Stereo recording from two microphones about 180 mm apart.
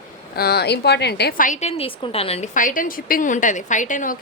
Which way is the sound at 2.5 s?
45° left (ahead or behind).